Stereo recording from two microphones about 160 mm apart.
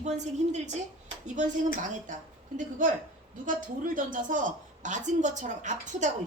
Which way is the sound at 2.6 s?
55° right (ahead or behind).